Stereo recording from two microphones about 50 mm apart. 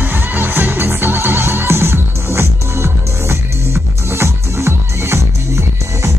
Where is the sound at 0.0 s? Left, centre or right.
Right.